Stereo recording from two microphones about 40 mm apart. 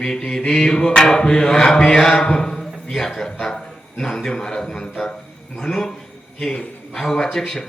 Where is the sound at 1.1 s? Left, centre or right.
Centre.